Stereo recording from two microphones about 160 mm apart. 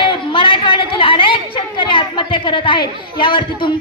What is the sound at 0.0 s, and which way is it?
A woman's voice, 30° left (ahead or behind).